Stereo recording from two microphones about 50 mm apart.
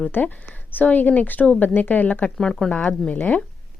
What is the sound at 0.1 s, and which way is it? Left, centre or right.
Speech, left.